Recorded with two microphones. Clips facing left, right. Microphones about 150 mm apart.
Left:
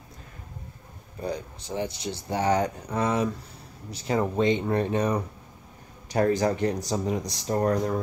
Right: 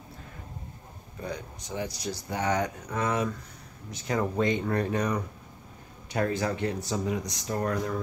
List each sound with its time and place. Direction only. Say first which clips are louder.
1.2 s speech: left 5 dB; 30° left (ahead or behind)
6.0 s speech: left 5 dB; 40° left (ahead or behind)